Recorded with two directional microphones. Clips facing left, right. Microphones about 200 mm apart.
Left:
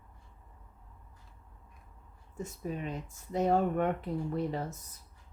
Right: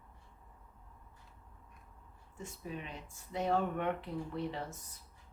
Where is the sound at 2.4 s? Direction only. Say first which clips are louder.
Left 6 dB; 45° left (ahead or behind).